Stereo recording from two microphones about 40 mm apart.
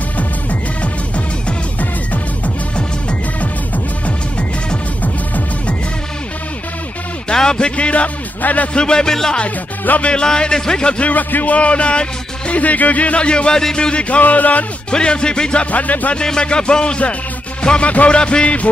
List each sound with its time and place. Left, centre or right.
3.3 s music: left
7.3 s a sound: centre
7.7 s speech: left
8.7 s speech: left
11.1 s speech: left
14.2 s speech: left
14.9 s speech: left
15.7 s speech: left
16.2 s speech: left